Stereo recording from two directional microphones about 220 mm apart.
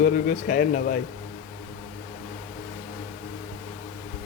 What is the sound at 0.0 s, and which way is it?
Speech, 35° left (ahead or behind).